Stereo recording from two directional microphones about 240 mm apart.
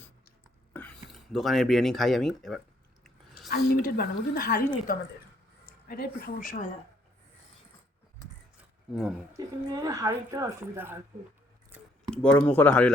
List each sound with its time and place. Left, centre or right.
0.7 s speech: centre
3.5 s speech: left
8.9 s speech: centre
9.8 s speech: centre
12.1 s speech: centre